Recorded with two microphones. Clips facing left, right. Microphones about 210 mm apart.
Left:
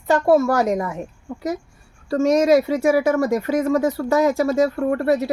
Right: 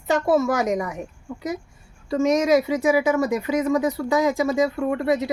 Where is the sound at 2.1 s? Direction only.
15° right (ahead or behind).